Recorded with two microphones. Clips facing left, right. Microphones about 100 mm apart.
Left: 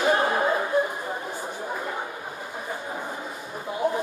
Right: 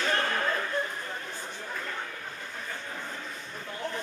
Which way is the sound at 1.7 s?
20° left (ahead or behind).